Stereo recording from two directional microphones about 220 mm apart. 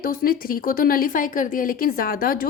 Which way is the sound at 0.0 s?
40° left (ahead or behind).